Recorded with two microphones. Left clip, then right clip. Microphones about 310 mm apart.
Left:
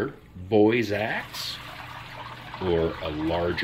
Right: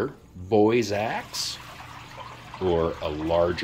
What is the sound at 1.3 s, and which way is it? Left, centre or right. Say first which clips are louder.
Speech: right 2 dB; right.